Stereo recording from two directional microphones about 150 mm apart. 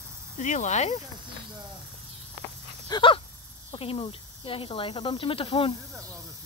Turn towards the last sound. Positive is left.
turn(degrees=35)  # may be behind; listen again after turning